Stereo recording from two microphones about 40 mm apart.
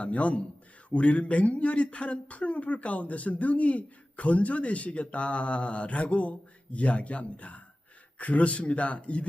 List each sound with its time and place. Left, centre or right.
0.0 s speech: left